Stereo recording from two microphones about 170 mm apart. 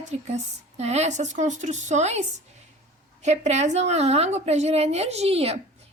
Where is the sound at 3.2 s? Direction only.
40° right (ahead or behind).